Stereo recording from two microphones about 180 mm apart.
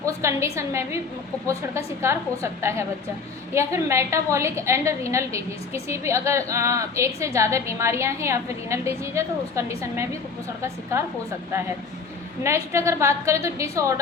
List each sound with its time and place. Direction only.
0.0 s a woman's voice: 15° right (ahead or behind)
12.4 s a woman's voice: 15° right (ahead or behind)